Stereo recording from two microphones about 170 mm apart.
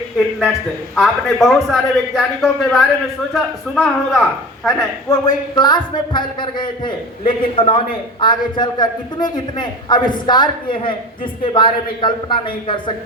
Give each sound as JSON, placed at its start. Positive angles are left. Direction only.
{"t": 0.9, "sound": "a man's voice", "side_deg": 0}
{"t": 5.0, "sound": "a man's voice", "side_deg": 25}